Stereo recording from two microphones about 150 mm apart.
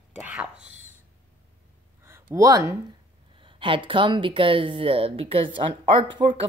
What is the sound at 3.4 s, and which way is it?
Speech, 35° right (ahead or behind).